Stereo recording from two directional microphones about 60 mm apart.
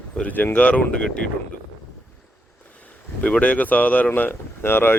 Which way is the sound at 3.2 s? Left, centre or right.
Left.